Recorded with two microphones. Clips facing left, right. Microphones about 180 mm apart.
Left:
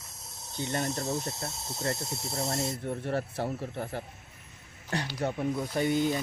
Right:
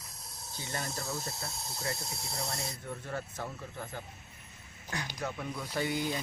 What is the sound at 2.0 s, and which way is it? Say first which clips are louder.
Speech: left 6 dB; centre (ahead or behind).